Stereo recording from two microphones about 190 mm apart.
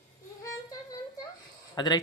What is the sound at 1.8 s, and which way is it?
Speech, 20° left (ahead or behind).